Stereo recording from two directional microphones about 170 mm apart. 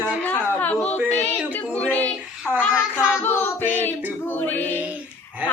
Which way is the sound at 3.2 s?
10° left (ahead or behind).